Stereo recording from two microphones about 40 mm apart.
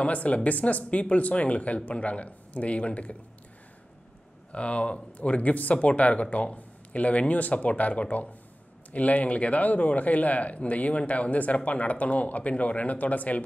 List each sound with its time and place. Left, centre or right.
0.0 s speech: left
4.5 s speech: left